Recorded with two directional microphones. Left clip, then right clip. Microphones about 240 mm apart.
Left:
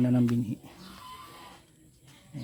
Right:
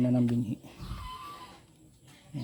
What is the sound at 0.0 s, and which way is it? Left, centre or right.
Speech, centre.